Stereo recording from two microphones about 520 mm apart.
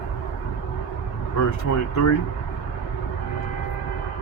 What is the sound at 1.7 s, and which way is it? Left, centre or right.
Speech, left.